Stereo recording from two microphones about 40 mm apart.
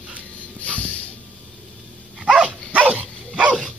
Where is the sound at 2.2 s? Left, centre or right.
Right.